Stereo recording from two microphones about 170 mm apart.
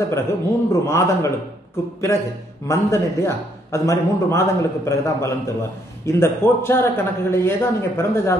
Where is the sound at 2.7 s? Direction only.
15° left (ahead or behind).